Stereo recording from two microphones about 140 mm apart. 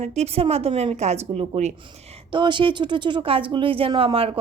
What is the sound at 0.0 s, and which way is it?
Speech, 50° right (ahead or behind).